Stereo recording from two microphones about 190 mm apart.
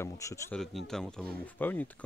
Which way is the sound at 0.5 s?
Centre (ahead or behind).